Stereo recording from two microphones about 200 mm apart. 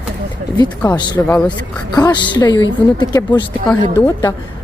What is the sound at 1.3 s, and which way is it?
Speech, 5° left (ahead or behind).